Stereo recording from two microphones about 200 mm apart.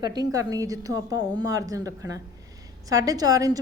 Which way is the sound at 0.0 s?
20° right (ahead or behind).